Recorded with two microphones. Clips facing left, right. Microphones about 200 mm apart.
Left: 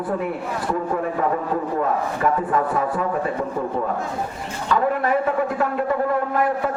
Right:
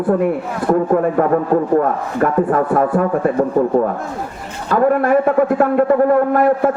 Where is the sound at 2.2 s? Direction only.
50° right (ahead or behind).